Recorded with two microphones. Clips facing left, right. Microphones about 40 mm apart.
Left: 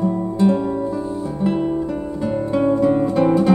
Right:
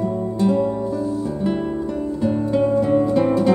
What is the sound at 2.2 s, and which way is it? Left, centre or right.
Music, centre.